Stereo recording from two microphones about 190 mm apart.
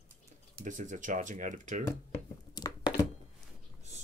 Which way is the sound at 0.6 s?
40° right (ahead or behind).